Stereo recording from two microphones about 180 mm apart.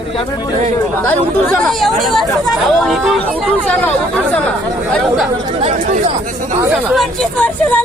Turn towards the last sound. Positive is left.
turn(degrees=5)  # may be behind; listen again after turning